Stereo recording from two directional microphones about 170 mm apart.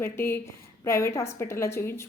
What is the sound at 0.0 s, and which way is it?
A woman's voice, 15° left (ahead or behind).